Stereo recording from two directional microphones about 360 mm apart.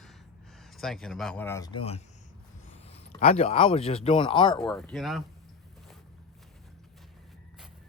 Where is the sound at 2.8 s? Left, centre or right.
Centre.